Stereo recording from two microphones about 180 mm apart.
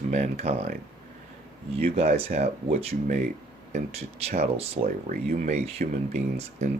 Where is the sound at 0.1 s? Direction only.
40° right (ahead or behind).